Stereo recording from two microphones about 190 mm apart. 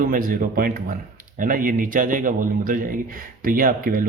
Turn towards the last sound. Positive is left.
turn(degrees=-50)  # may be behind; listen again after turning